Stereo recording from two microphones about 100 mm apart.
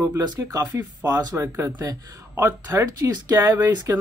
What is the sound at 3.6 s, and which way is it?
Speech, 35° right (ahead or behind).